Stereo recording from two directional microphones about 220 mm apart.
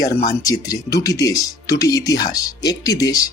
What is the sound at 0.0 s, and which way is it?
Speech, 15° left (ahead or behind).